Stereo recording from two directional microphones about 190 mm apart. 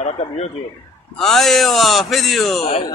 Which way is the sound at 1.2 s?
Centre (ahead or behind).